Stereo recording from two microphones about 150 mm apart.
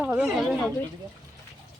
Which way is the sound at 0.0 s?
5° right (ahead or behind).